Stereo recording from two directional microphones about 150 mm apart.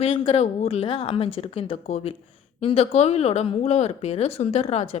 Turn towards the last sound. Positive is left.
turn(degrees=40)  # may be behind; listen again after turning